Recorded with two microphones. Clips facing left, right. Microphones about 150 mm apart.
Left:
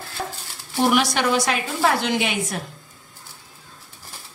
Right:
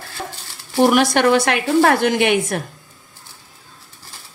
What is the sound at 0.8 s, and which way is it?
A woman's voice, 55° right (ahead or behind).